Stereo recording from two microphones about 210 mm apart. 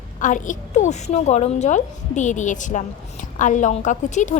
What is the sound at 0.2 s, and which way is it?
A woman's voice, 35° left (ahead or behind).